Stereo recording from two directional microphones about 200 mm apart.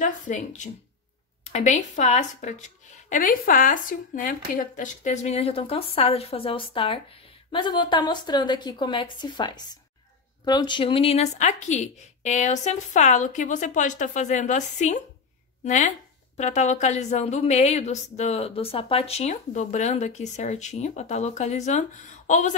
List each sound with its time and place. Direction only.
0.0 s a woman's voice: 40° left (ahead or behind)